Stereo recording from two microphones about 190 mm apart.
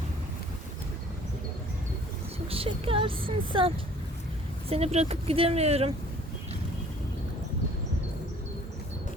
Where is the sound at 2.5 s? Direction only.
30° right (ahead or behind).